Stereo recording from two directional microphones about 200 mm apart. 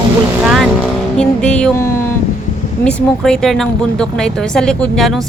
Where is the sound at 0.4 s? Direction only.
Centre (ahead or behind).